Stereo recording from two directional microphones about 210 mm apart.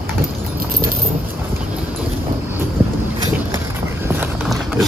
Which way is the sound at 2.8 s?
10° right (ahead or behind).